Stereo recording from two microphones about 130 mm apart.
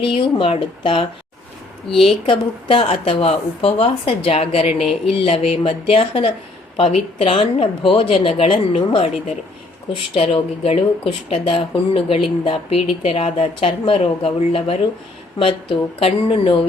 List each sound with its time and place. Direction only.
0.0 s speech: 40° left (ahead or behind)
2.2 s speech: 45° left (ahead or behind)